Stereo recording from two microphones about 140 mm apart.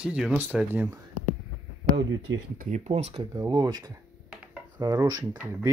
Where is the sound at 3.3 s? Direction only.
30° right (ahead or behind).